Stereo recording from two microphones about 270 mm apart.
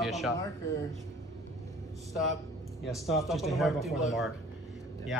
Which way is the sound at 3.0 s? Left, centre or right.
Centre.